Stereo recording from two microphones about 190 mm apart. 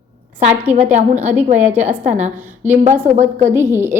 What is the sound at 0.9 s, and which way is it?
A woman's voice, 35° right (ahead or behind).